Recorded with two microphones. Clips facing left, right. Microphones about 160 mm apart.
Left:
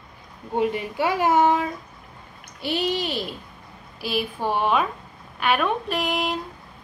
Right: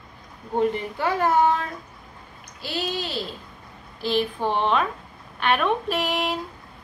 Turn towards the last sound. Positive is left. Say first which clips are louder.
# even
turn(degrees=0)  # may be behind; listen again after turning